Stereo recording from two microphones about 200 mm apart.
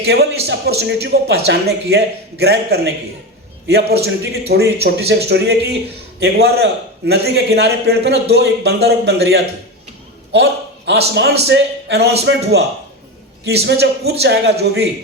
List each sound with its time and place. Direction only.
0.0 s a man's voice: 55° right (ahead or behind)